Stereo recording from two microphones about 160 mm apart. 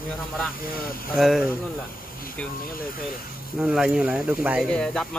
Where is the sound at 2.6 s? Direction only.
65° left (ahead or behind).